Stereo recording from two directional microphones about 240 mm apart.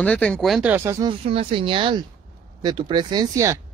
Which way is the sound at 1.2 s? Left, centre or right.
Right.